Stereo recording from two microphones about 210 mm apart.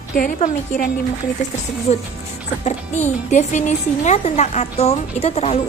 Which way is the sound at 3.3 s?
35° left (ahead or behind).